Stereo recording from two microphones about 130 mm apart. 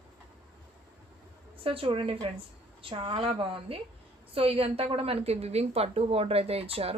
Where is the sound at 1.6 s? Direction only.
45° right (ahead or behind).